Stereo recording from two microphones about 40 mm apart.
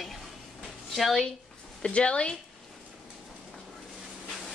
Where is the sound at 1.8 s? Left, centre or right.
Left.